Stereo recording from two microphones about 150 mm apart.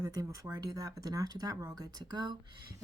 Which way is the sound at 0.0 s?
25° right (ahead or behind).